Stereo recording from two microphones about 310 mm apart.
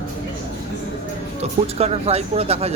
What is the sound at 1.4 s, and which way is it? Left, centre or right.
Speech, centre.